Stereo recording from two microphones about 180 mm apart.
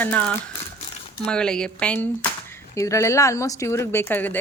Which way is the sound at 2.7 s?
15° left (ahead or behind).